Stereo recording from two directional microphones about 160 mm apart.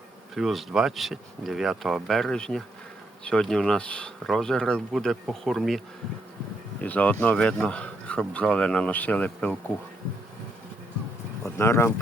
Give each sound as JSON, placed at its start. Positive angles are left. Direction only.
{"t": 0.3, "sound": "speech", "side_deg": 0}
{"t": 6.8, "sound": "speech", "side_deg": 10}
{"t": 11.4, "sound": "speech", "side_deg": 15}